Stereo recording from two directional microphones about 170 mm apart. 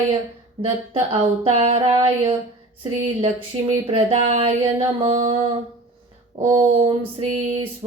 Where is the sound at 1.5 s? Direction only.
35° right (ahead or behind).